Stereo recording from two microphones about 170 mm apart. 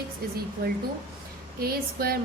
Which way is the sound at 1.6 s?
60° right (ahead or behind).